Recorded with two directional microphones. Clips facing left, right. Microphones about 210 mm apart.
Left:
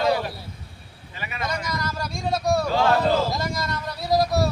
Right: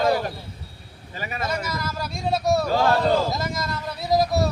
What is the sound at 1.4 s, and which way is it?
A man's voice, 5° right (ahead or behind).